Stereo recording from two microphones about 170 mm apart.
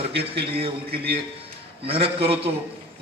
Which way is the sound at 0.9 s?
65° right (ahead or behind).